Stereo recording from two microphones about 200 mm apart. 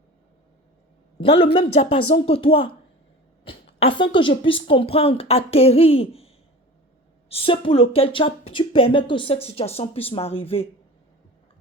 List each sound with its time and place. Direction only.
1.2 s speech: 30° left (ahead or behind)
3.8 s speech: 25° left (ahead or behind)